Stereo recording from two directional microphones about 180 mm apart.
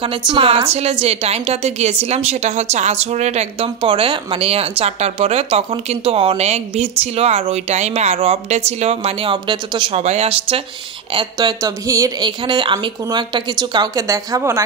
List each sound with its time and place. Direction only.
0.0 s a woman's voice: 30° right (ahead or behind)